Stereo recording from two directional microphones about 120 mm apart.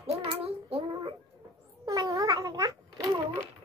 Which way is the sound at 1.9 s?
30° right (ahead or behind).